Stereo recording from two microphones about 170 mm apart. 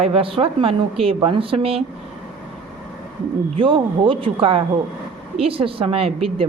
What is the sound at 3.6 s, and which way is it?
Speech, 30° right (ahead or behind).